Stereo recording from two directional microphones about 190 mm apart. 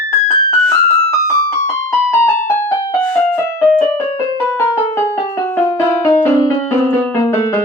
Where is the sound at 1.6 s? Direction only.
15° left (ahead or behind).